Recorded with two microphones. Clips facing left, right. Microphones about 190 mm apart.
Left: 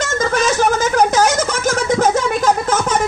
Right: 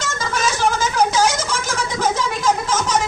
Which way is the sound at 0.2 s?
50° left (ahead or behind).